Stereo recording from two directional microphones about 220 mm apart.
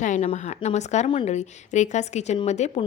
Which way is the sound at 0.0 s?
30° left (ahead or behind).